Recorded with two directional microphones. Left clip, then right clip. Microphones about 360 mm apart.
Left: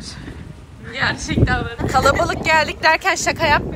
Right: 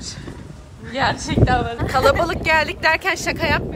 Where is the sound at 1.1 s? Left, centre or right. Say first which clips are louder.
Right 1 dB; right.